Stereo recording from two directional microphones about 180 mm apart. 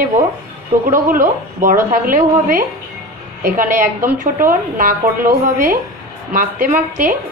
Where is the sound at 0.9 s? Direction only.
50° right (ahead or behind).